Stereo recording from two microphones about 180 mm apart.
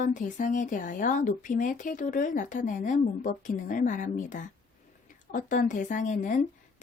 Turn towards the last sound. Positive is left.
turn(degrees=45)  # may be behind; listen again after turning